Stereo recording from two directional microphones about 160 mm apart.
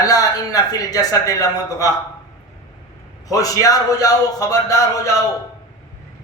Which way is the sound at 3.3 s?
20° left (ahead or behind).